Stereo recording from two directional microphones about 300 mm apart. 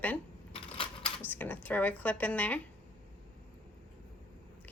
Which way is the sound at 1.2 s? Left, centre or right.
Centre.